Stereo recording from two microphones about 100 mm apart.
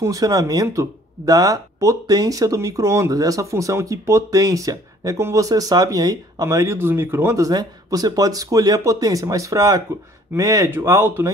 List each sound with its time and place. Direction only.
0.0 s speech: 35° right (ahead or behind)
6.4 s speech: 30° right (ahead or behind)